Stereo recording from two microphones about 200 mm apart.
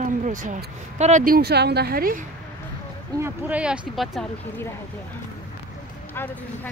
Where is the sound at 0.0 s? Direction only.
40° right (ahead or behind).